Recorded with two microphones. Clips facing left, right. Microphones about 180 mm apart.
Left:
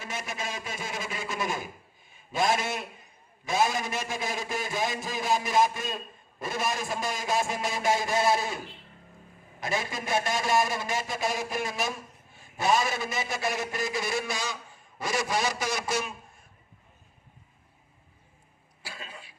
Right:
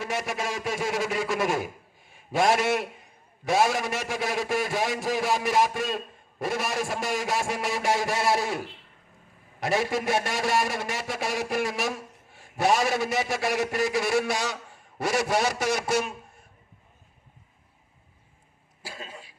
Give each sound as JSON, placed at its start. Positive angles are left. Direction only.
{"t": 0.0, "sound": "a man's voice", "side_deg": -75}
{"t": 18.8, "sound": "cough", "side_deg": -40}